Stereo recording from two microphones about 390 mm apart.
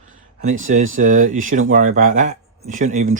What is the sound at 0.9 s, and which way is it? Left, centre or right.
Speech, centre.